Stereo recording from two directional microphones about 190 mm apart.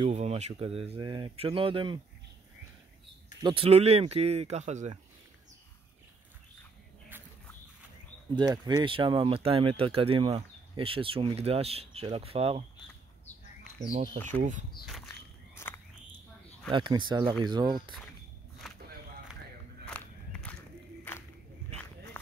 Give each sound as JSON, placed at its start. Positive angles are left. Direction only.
{"t": 0.0, "sound": "speech", "side_deg": -35}
{"t": 3.4, "sound": "speech", "side_deg": -30}
{"t": 8.4, "sound": "speech", "side_deg": -20}
{"t": 14.1, "sound": "speech", "side_deg": 10}
{"t": 15.0, "sound": "walk", "side_deg": 15}
{"t": 16.7, "sound": "speech", "side_deg": -25}
{"t": 18.6, "sound": "a sound", "side_deg": 0}
{"t": 19.9, "sound": "walk", "side_deg": 5}